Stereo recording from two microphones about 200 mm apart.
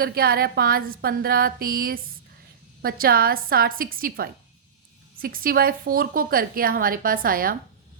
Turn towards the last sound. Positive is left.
turn(degrees=-45)  # may be behind; listen again after turning